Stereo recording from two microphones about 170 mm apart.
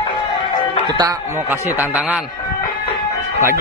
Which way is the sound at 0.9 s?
25° right (ahead or behind).